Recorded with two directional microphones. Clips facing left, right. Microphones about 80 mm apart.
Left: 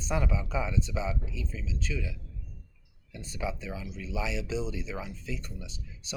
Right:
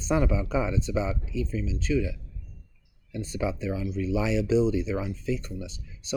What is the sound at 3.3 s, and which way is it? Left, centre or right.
Speech, right.